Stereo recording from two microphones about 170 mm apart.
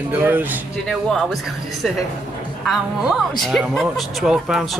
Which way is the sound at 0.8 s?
Centre (ahead or behind).